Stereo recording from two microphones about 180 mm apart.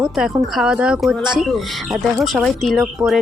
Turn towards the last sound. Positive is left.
turn(degrees=0)  # may be behind; listen again after turning